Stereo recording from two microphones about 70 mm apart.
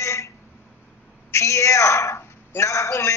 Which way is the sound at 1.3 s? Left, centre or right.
Left.